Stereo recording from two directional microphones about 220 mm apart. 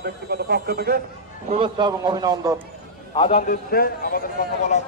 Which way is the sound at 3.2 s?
30° left (ahead or behind).